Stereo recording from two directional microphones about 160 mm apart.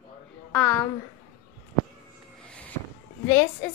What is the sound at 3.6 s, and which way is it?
Speech, 10° left (ahead or behind).